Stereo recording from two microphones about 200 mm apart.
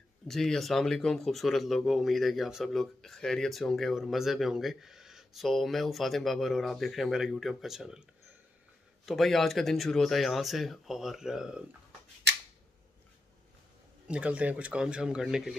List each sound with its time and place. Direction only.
0.3 s speech: centre (ahead or behind)
9.0 s speech: centre (ahead or behind)
12.2 s a sound: 60° right (ahead or behind)
14.0 s speech: 5° right (ahead or behind)